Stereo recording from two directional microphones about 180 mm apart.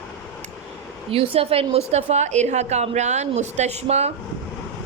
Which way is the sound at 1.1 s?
35° right (ahead or behind).